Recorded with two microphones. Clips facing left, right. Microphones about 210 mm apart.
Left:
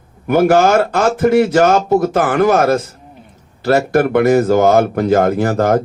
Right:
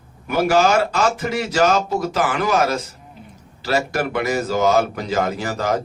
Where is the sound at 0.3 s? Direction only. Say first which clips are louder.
Left 6 dB; 55° left (ahead or behind).